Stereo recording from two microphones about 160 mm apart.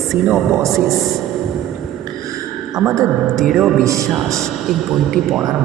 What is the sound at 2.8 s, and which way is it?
Speech, 20° right (ahead or behind).